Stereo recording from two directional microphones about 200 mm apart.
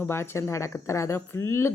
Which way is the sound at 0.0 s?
10° left (ahead or behind).